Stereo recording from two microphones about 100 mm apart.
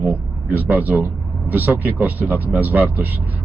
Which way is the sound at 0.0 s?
15° right (ahead or behind).